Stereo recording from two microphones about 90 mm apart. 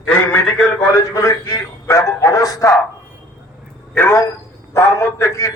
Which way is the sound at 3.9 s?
25° left (ahead or behind).